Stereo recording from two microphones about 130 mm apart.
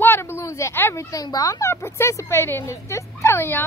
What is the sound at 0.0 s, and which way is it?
A woman's voice, 20° left (ahead or behind).